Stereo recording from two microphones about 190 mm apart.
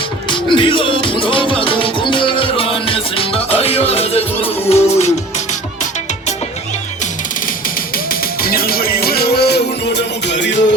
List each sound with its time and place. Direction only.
0.3 s music: 25° left (ahead or behind)
8.4 s music: 50° left (ahead or behind); by 10.6 s 70° left (ahead or behind)